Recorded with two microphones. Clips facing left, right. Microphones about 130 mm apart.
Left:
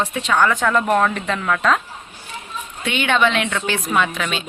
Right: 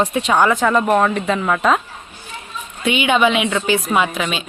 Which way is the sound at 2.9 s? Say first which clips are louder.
Right 3 dB; 10° right (ahead or behind).